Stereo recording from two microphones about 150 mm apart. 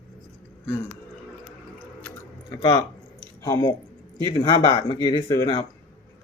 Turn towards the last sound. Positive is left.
turn(degrees=25)  # may be behind; listen again after turning